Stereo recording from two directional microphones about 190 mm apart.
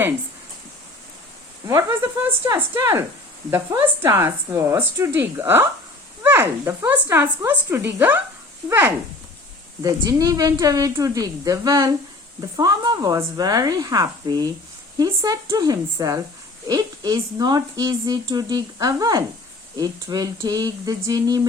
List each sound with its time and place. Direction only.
1.6 s a woman's voice: 15° right (ahead or behind)
9.8 s a woman's voice: 20° right (ahead or behind)